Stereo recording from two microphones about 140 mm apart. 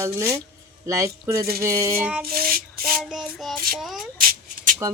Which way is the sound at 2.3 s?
90° right.